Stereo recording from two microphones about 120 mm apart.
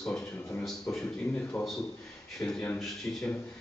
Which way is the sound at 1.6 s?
15° left (ahead or behind).